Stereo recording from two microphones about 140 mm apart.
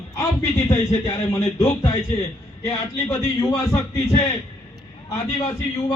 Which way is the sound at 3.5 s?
25° left (ahead or behind).